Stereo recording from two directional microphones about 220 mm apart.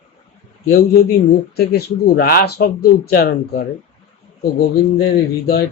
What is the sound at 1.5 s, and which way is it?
Speech, 45° left (ahead or behind).